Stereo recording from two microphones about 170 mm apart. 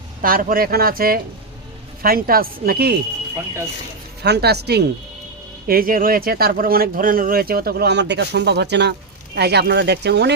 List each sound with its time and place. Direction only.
0.2 s speech: 55° right (ahead or behind)
4.2 s speech: 75° right (ahead or behind)
5.6 s speech: 60° right (ahead or behind); by 10.3 s 85° right